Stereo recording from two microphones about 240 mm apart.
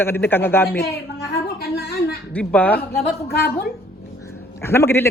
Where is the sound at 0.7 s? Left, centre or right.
Left.